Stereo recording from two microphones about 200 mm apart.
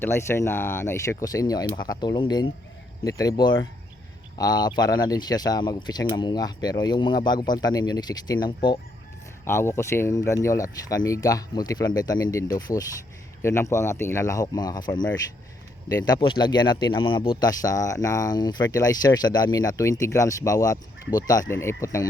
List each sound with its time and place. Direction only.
0.0 s speech: 15° left (ahead or behind)
9.4 s speech: 15° left (ahead or behind)